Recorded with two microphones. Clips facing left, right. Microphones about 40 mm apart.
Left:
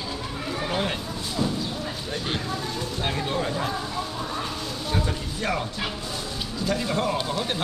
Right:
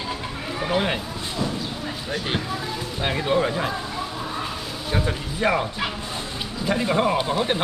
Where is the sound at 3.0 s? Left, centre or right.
Centre.